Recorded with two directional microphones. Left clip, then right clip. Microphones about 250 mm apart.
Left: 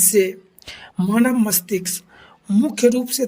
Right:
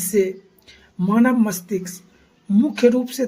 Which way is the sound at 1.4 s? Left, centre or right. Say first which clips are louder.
Left 1 dB; left.